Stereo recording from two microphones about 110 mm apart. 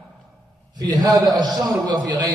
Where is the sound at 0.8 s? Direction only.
40° right (ahead or behind).